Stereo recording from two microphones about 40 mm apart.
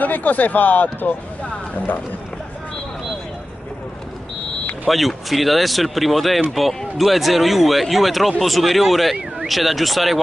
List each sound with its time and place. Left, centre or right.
0.0 s speech: left
4.8 s speech: centre